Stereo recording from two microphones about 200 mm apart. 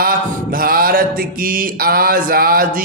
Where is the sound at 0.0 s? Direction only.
45° right (ahead or behind).